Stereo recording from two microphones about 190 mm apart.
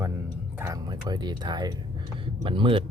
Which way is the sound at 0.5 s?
15° right (ahead or behind).